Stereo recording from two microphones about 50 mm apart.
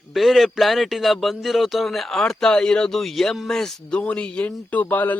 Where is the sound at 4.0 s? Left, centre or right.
Left.